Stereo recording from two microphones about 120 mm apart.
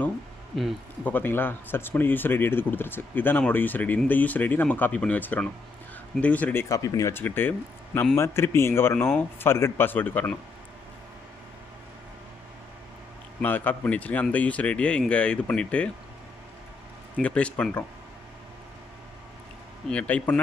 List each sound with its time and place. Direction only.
1.0 s speech: 15° left (ahead or behind)
13.4 s speech: 15° left (ahead or behind)
17.2 s speech: 10° left (ahead or behind)
19.9 s speech: 10° left (ahead or behind)